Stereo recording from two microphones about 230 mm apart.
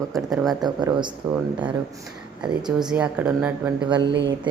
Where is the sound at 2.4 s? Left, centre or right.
Centre.